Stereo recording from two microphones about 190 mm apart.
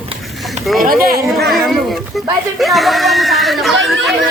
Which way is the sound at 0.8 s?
50° right (ahead or behind).